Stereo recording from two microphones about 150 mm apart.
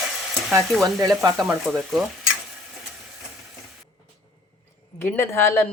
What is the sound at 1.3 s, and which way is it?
Speech, centre (ahead or behind).